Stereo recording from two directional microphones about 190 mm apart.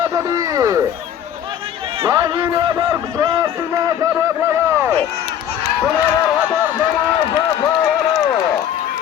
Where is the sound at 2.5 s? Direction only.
15° right (ahead or behind).